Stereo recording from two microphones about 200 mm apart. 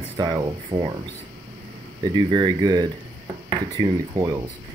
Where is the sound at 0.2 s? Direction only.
20° right (ahead or behind).